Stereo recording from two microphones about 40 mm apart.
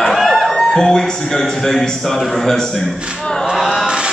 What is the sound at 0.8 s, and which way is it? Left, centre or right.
A man's voice, centre.